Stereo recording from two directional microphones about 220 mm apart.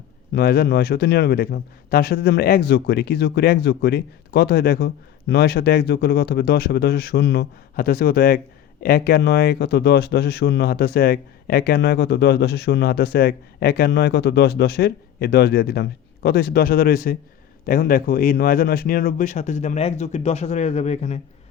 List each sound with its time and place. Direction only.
0.3 s a man's voice: 45° left (ahead or behind)